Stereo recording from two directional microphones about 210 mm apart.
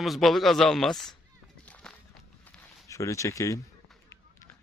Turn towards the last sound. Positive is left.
turn(degrees=15)  # may be behind; listen again after turning